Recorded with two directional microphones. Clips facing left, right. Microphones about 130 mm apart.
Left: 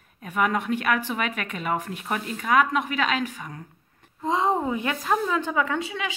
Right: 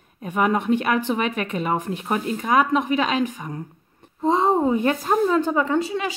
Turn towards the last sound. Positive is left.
turn(degrees=-40)  # may be behind; listen again after turning